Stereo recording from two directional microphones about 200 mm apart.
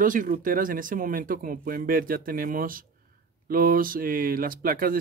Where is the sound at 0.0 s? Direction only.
40° right (ahead or behind).